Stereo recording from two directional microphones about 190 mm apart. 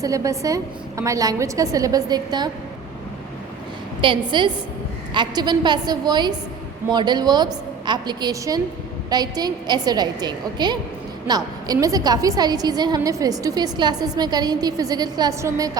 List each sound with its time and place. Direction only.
0.0 s a woman's voice: 15° right (ahead or behind)
4.0 s a woman's voice: 25° right (ahead or behind)